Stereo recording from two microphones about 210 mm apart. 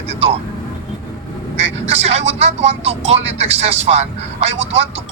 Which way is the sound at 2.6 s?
30° right (ahead or behind).